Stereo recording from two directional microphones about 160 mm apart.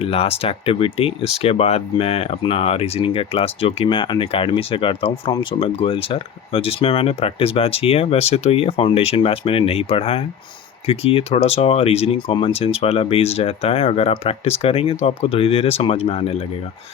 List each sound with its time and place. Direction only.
0.0 s speech: 35° left (ahead or behind)